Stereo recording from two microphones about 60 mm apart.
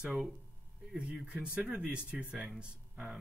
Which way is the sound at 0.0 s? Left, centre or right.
Centre.